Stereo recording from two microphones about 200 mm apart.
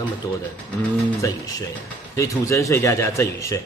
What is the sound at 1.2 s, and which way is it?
Speech, 15° left (ahead or behind).